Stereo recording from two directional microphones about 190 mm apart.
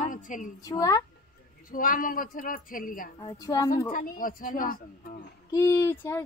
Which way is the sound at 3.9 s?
45° left (ahead or behind).